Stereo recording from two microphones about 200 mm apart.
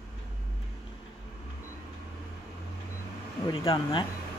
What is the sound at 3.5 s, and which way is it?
Speech, 25° left (ahead or behind).